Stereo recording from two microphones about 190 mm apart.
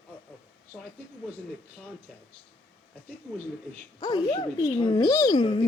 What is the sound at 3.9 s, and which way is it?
Speech, 20° left (ahead or behind).